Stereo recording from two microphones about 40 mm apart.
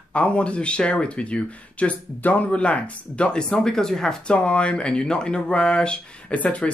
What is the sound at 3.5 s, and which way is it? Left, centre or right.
Speech, centre.